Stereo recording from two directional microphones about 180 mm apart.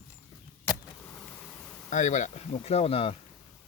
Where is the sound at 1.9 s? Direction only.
40° left (ahead or behind).